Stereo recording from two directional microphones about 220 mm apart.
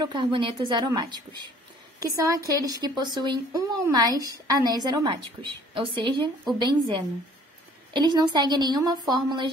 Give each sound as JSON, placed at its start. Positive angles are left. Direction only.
{"t": 0.0, "sound": "a woman's voice", "side_deg": -20}
{"t": 7.9, "sound": "a woman's voice", "side_deg": -20}